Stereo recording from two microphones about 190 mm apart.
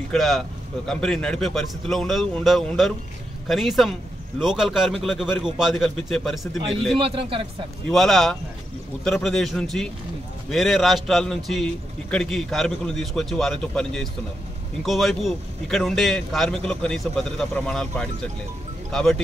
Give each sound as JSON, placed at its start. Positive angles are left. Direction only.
{"t": 0.1, "sound": "a man's voice", "side_deg": 0}
{"t": 7.0, "sound": "speech", "side_deg": -30}
{"t": 7.9, "sound": "a man's voice", "side_deg": 0}